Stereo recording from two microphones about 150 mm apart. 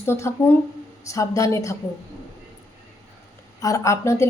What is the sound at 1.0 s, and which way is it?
Speech, 20° left (ahead or behind).